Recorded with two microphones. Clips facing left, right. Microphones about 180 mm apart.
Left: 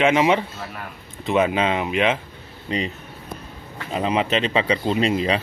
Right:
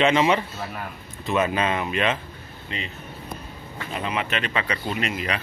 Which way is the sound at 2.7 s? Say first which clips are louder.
Left 9 dB; 35° left (ahead or behind).